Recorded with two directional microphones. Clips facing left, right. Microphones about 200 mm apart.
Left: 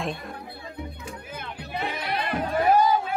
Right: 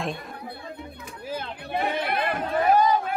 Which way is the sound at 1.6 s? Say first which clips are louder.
Right 4 dB; 55° right (ahead or behind).